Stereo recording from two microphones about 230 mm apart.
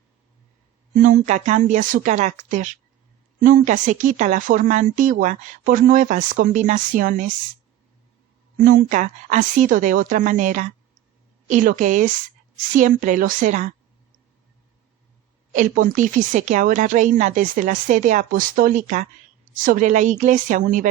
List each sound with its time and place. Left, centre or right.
1.0 s a woman's voice: right
8.6 s a woman's voice: right
15.5 s a woman's voice: right